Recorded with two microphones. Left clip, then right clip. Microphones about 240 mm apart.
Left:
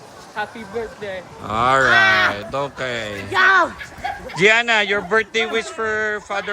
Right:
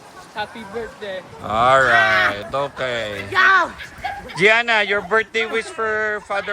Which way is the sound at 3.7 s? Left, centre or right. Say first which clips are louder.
Left 1 dB; centre.